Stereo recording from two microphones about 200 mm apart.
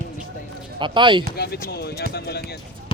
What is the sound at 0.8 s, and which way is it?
Speech, 25° right (ahead or behind).